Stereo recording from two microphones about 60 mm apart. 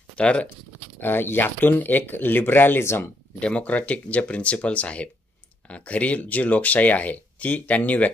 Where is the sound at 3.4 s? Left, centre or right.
Left.